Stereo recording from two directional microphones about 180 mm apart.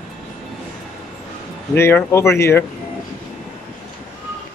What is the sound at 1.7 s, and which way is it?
Speech, 10° left (ahead or behind).